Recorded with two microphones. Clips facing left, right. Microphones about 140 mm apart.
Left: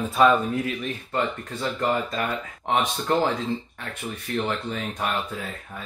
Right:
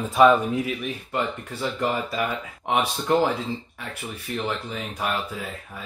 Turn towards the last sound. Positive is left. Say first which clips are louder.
# even
turn(degrees=-10)  # may be behind; listen again after turning